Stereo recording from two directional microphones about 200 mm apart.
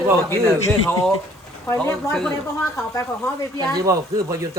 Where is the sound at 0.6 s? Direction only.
10° left (ahead or behind).